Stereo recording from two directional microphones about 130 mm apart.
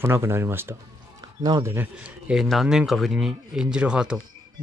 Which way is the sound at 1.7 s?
15° right (ahead or behind).